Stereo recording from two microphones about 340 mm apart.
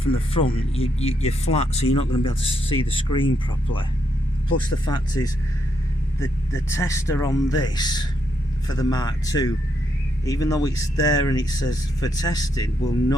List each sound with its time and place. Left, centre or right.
0.0 s speech: centre